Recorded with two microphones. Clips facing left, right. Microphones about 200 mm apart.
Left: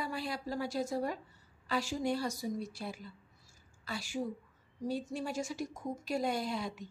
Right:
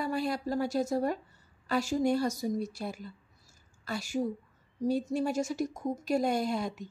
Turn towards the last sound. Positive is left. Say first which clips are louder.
# right 5 dB
turn(degrees=-45)  # may be behind; listen again after turning